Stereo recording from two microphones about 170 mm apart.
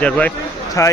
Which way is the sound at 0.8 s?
20° left (ahead or behind).